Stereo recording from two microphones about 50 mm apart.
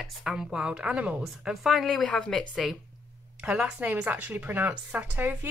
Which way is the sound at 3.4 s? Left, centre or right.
Right.